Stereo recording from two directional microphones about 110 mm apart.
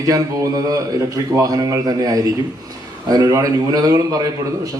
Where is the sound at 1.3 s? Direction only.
30° right (ahead or behind).